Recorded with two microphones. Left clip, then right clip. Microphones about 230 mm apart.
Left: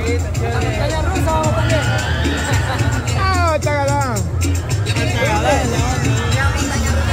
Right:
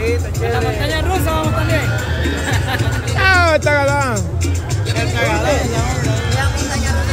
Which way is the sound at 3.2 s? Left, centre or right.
Right.